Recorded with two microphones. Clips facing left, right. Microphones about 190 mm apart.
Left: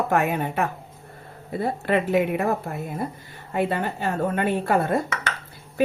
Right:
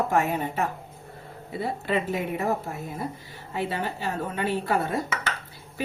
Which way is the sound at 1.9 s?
60° left (ahead or behind).